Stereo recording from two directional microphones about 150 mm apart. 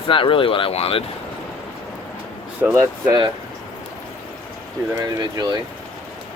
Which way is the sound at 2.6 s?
15° right (ahead or behind).